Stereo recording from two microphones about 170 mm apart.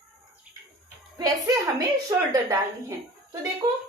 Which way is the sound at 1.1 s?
20° right (ahead or behind).